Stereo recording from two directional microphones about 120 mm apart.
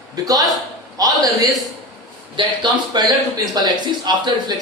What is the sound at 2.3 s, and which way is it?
Speech, 40° right (ahead or behind).